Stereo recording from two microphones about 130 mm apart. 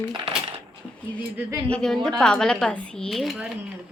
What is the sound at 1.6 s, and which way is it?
Speech, 5° left (ahead or behind).